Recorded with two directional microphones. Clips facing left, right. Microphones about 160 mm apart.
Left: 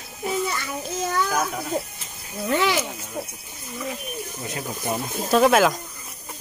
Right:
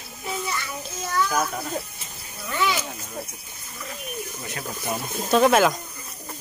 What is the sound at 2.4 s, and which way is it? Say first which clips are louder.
Speech: left 4 dB; 75° left (ahead or behind).